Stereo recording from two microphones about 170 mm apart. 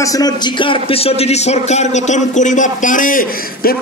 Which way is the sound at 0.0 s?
20° left (ahead or behind).